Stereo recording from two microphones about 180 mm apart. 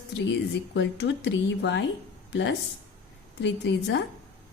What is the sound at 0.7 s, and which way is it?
A woman's voice, 80° left.